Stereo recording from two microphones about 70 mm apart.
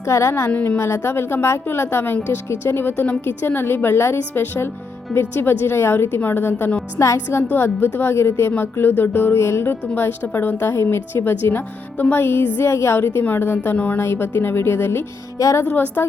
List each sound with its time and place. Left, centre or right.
0.0 s a woman's voice: left
0.5 s speech: left
0.8 s speech: left; by 6.8 s centre
7.5 s speech: left
15.4 s a woman's voice: left
15.6 s speech: left